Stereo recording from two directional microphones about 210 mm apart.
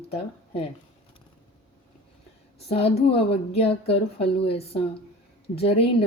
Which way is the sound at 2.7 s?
30° left (ahead or behind).